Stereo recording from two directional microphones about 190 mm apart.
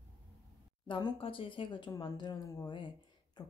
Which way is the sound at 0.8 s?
25° left (ahead or behind).